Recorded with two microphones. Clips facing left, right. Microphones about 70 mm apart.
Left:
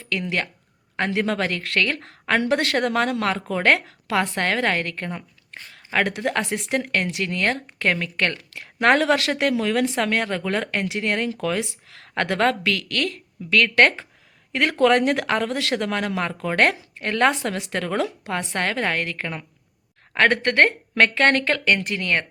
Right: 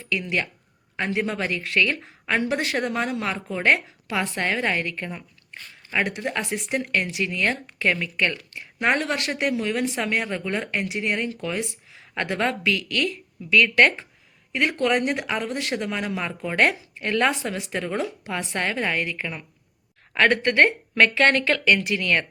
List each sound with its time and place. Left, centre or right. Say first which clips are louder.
0.0 s speech: even; left
4.2 s speech: left 2 dB; left
5.9 s speech: left 3 dB; left
10.0 s speech: left 3 dB; left
14.5 s speech: left 4 dB; left
17.4 s speech: left 2 dB; left
18.3 s a woman's voice: left 2 dB; left